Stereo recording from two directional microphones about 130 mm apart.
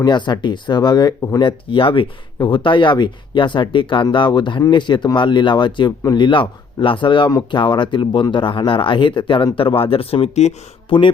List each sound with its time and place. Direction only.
0.0 s speech: 35° left (ahead or behind); by 10.5 s 55° left (ahead or behind)
10.8 s speech: 40° left (ahead or behind)